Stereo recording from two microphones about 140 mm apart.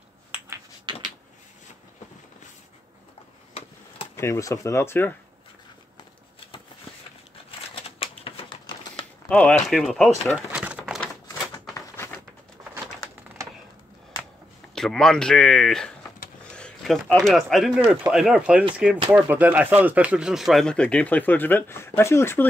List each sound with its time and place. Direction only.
0.9 s a sound: 35° right (ahead or behind)
4.2 s speech: 20° left (ahead or behind)
7.7 s typewriter: 40° left (ahead or behind)
9.3 s speech: 10° left (ahead or behind); by 10.8 s 10° right (ahead or behind)
14.8 s speech: 5° left (ahead or behind)
16.4 s a sound: 5° left (ahead or behind)
17.1 s speech: centre (ahead or behind); by 22.5 s 15° left (ahead or behind)